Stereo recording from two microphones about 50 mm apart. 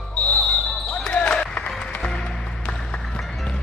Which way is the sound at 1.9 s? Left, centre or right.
Centre.